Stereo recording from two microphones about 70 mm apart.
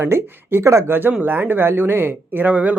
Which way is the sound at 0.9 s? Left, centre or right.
Right.